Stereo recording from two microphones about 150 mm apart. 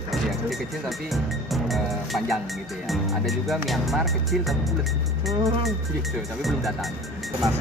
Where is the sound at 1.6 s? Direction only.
Centre (ahead or behind).